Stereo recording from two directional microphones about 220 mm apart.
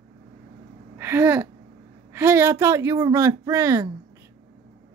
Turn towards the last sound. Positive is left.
turn(degrees=-15)  # may be behind; listen again after turning